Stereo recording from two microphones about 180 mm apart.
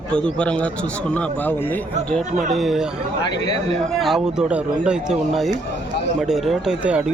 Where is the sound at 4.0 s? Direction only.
Centre (ahead or behind).